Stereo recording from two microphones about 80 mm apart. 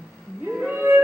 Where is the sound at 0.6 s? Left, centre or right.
Right.